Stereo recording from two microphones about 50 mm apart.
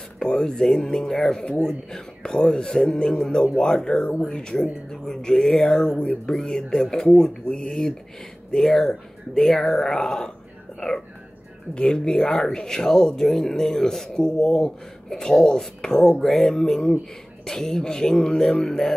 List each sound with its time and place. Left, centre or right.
0.2 s speech: centre
11.7 s speech: centre